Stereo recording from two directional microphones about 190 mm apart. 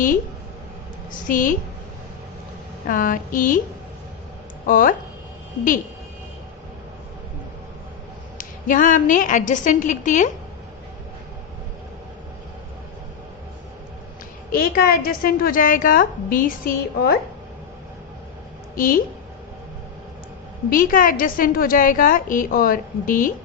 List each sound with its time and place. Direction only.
1.3 s a woman's voice: 45° left (ahead or behind)
2.8 s a woman's voice: 50° left (ahead or behind)
4.6 s a woman's voice: 45° left (ahead or behind)
8.4 s a woman's voice: 45° left (ahead or behind)
14.5 s a woman's voice: 50° left (ahead or behind)
20.7 s a woman's voice: 45° left (ahead or behind)